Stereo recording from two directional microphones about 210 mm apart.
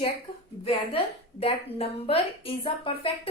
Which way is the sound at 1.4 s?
25° left (ahead or behind).